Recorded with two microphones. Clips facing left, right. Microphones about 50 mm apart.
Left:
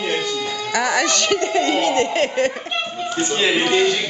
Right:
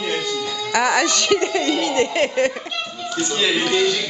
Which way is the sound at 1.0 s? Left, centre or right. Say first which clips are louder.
Right 1 dB; left.